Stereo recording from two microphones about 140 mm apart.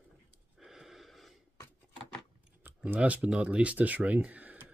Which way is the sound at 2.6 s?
10° right (ahead or behind).